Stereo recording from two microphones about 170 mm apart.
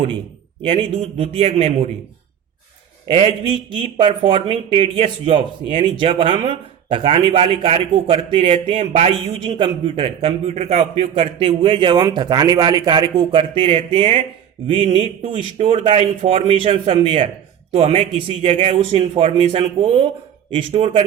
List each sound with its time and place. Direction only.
0.6 s a man's voice: 35° right (ahead or behind)
3.1 s a man's voice: 30° right (ahead or behind)